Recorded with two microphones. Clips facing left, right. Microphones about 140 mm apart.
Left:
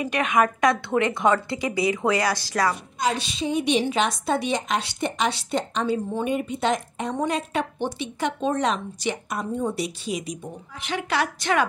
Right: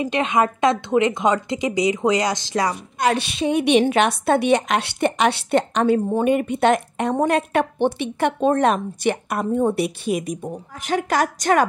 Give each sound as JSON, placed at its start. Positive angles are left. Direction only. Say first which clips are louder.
{"t": 0.0, "sound": "speech", "louder": "right 2 dB", "side_deg": -25}
{"t": 3.0, "sound": "a woman's voice", "louder": "right 7 dB", "side_deg": -60}